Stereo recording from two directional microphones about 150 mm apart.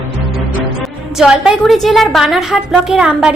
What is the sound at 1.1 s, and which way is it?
A woman's voice, 5° right (ahead or behind).